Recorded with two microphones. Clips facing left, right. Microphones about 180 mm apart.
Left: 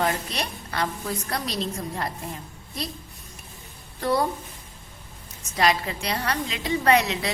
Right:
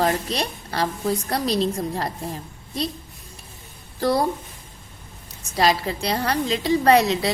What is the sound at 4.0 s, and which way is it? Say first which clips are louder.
Speech: right 3 dB; 35° right (ahead or behind).